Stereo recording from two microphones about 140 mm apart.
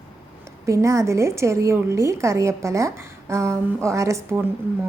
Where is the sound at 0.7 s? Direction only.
20° right (ahead or behind).